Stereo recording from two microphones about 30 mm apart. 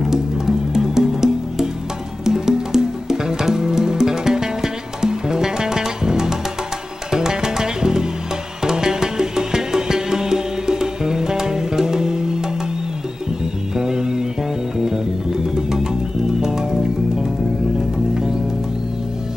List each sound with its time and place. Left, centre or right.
0.0 s music: centre
13.7 s music: centre
15.5 s music: right